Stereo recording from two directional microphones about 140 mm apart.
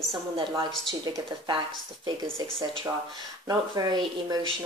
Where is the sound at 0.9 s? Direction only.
30° right (ahead or behind).